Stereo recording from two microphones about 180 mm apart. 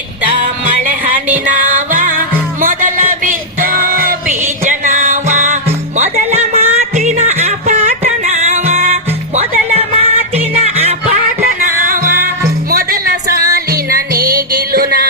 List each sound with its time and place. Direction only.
0.8 s music: 50° right (ahead or behind)
6.0 s a sound: 40° right (ahead or behind)
11.6 s music: 50° right (ahead or behind)
14.2 s music: 20° right (ahead or behind)
14.7 s music: 55° right (ahead or behind)